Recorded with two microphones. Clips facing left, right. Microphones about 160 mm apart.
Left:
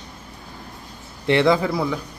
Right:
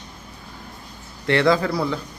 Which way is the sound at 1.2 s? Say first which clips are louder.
Left 1 dB; 20° left (ahead or behind).